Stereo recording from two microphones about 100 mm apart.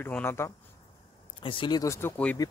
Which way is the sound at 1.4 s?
50° left (ahead or behind).